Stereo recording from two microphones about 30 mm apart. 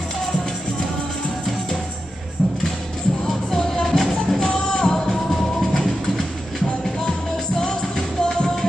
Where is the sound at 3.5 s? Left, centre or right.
Left.